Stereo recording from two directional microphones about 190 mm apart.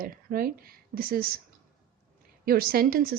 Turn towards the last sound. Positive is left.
turn(degrees=-50)  # may be behind; listen again after turning